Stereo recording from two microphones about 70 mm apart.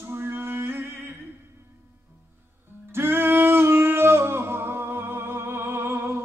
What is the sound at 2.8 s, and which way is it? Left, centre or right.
Music, right.